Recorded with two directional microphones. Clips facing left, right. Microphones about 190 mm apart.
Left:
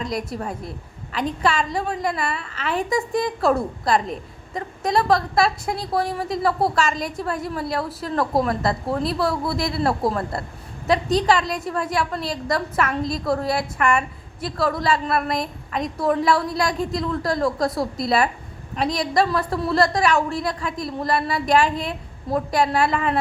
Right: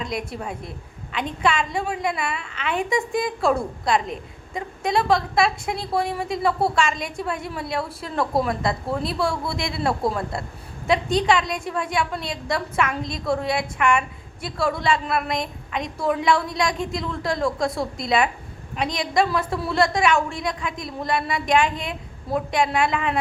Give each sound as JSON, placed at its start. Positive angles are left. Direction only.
{"t": 0.0, "sound": "a woman's voice", "side_deg": 0}